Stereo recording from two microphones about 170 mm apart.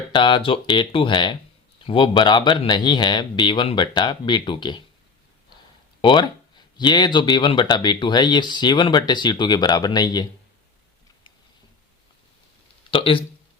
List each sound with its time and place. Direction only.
0.1 s speech: 30° left (ahead or behind)
6.0 s speech: 25° left (ahead or behind)
12.9 s speech: 30° left (ahead or behind)